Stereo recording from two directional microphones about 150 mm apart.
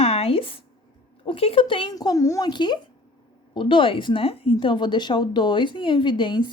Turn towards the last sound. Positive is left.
turn(degrees=30)  # may be behind; listen again after turning